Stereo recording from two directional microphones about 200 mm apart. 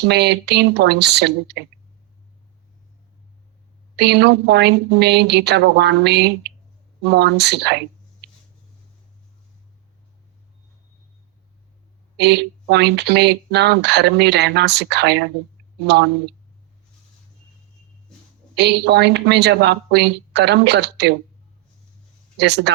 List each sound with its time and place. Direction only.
0.1 s speech: 55° right (ahead or behind)
3.9 s speech: 55° right (ahead or behind)
12.1 s speech: 55° right (ahead or behind)
18.5 s speech: 55° right (ahead or behind)
22.4 s speech: 55° right (ahead or behind)